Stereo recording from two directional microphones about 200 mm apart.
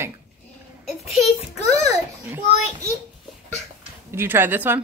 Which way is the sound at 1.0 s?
Centre (ahead or behind).